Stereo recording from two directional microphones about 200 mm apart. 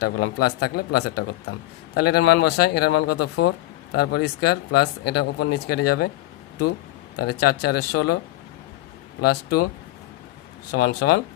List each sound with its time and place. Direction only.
0.0 s speech: 55° left (ahead or behind)
7.2 s speech: 55° left (ahead or behind)
9.2 s speech: 50° left (ahead or behind)
10.7 s speech: 55° left (ahead or behind)